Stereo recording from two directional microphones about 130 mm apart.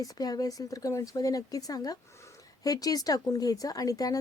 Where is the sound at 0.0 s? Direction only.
30° left (ahead or behind).